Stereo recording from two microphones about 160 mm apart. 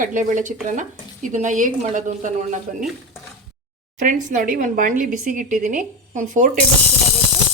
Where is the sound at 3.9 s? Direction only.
55° right (ahead or behind).